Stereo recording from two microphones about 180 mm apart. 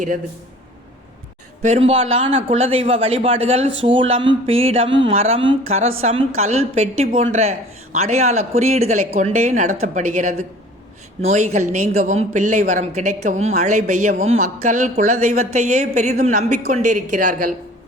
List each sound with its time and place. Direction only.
1.6 s speech: 35° right (ahead or behind)